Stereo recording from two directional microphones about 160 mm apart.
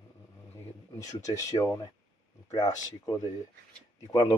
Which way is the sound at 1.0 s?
20° left (ahead or behind).